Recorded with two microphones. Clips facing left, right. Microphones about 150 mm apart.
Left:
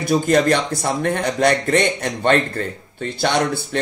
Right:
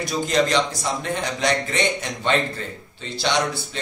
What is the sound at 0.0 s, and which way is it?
A man's voice, 55° left (ahead or behind).